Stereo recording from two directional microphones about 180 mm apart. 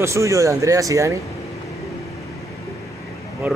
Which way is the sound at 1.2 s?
15° left (ahead or behind).